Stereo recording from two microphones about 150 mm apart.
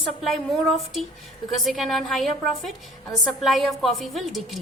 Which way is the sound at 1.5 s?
Centre (ahead or behind).